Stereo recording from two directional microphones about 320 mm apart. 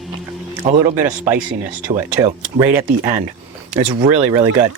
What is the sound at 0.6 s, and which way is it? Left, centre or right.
Speech, centre.